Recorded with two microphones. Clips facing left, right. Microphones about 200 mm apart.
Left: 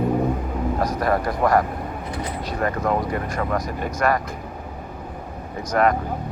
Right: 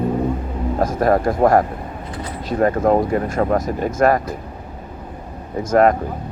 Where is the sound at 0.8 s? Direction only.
45° right (ahead or behind).